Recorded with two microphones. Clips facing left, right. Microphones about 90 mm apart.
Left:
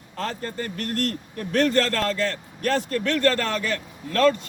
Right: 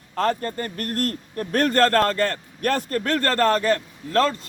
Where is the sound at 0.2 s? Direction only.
50° right (ahead or behind).